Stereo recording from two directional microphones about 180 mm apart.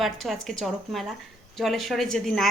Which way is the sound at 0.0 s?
Centre (ahead or behind).